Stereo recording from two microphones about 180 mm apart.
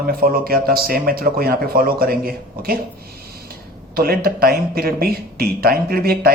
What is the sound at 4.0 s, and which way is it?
Speech, 55° right (ahead or behind).